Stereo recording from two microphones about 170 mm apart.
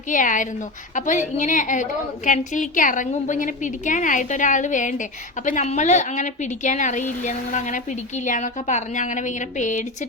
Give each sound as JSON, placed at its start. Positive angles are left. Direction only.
{"t": 0.1, "sound": "a woman's voice", "side_deg": 50}